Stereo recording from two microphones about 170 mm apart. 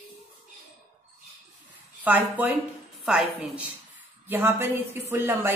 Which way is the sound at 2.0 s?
10° right (ahead or behind).